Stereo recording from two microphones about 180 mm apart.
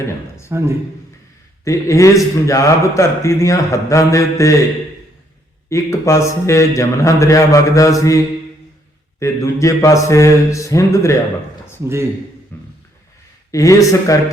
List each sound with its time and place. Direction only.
0.0 s a man's voice: 15° left (ahead or behind)
0.5 s a man's voice: 15° right (ahead or behind)
1.6 s a man's voice: 15° left (ahead or behind)
5.6 s a man's voice: 15° left (ahead or behind)
9.2 s a man's voice: 15° left (ahead or behind)
13.5 s a man's voice: 15° left (ahead or behind)